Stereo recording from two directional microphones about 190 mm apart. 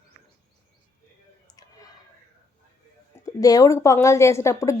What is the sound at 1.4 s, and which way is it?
Clicking, 20° left (ahead or behind).